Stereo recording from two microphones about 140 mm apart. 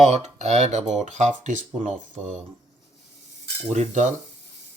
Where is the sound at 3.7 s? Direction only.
60° right (ahead or behind).